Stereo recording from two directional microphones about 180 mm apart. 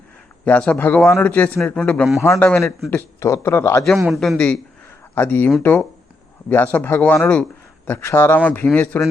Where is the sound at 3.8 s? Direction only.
Centre (ahead or behind).